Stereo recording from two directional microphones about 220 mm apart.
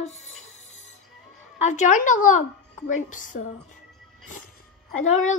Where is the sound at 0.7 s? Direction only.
60° left (ahead or behind).